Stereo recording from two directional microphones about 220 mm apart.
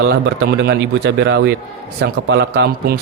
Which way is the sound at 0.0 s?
50° right (ahead or behind).